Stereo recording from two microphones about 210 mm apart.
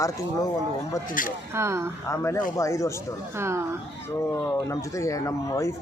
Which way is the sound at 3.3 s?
10° right (ahead or behind).